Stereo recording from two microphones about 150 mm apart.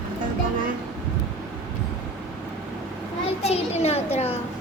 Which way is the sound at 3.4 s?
45° left (ahead or behind).